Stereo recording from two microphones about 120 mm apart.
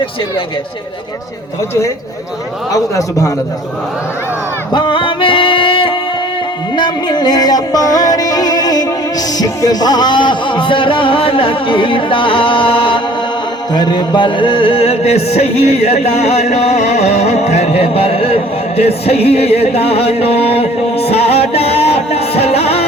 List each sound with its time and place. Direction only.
2.7 s a man's voice: 30° left (ahead or behind)
4.7 s music: 40° left (ahead or behind)
13.7 s a sound: 35° left (ahead or behind); by 18.3 s 55° left (ahead or behind)
18.8 s music: 55° left (ahead or behind)